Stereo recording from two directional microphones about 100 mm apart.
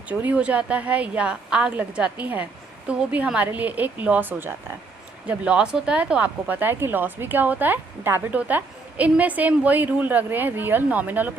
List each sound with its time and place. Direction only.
0.1 s speech: 15° right (ahead or behind)